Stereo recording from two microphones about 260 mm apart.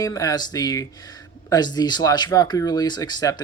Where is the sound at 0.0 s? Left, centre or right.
Centre.